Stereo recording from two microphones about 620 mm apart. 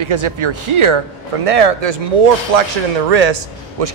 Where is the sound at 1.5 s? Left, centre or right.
Right.